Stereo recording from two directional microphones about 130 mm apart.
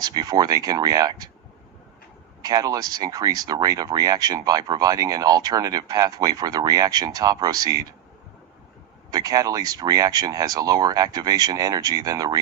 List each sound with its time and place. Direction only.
0.0 s speech: 30° right (ahead or behind)
2.4 s speech: 30° right (ahead or behind)
9.0 s speech: 30° right (ahead or behind)